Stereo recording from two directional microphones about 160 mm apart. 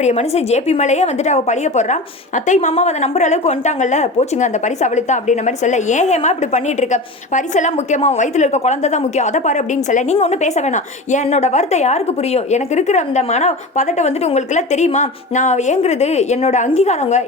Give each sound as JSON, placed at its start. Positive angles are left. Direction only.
{"t": 0.0, "sound": "a woman's voice", "side_deg": 45}